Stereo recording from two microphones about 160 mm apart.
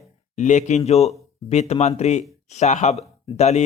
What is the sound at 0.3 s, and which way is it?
Speech, 50° left (ahead or behind).